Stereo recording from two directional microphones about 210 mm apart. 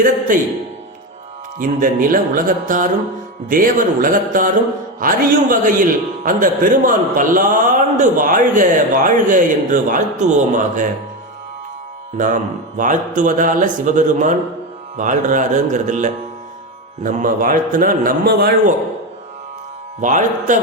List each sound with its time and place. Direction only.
0.3 s a man's voice: 40° right (ahead or behind)
1.5 s a man's voice: 40° right (ahead or behind)
12.1 s a man's voice: 40° right (ahead or behind)
20.0 s a man's voice: 35° right (ahead or behind)